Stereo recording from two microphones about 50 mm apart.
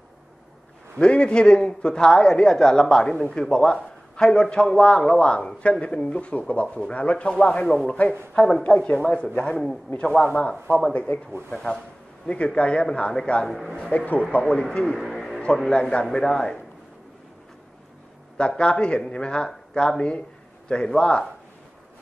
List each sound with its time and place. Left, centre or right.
0.9 s speech: left
13.5 s a man's voice: centre
13.7 s speech: left
14.5 s speech: centre
15.0 s a sound: centre
15.7 s speech: centre
18.6 s speech: left